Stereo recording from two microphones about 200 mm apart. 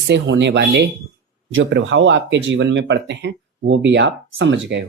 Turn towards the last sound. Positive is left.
turn(degrees=-65)  # may be behind; listen again after turning